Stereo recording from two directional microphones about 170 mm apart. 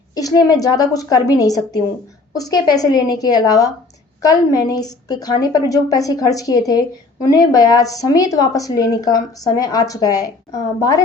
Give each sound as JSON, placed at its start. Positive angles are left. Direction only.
{"t": 0.1, "sound": "a woman's voice", "side_deg": 20}